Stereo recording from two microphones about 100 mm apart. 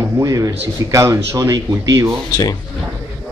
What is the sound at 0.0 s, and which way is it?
A man's voice, 35° right (ahead or behind).